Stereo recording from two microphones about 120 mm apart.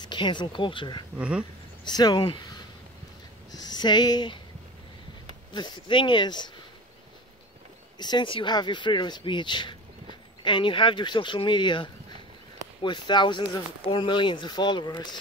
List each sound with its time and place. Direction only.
0.0 s speech: 40° left (ahead or behind)
1.1 s speech: 10° right (ahead or behind)
1.9 s speech: 35° left (ahead or behind)
5.5 s speech: 40° left (ahead or behind)
8.0 s speech: 40° left (ahead or behind)